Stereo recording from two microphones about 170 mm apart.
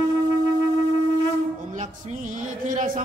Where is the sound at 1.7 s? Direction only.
45° right (ahead or behind).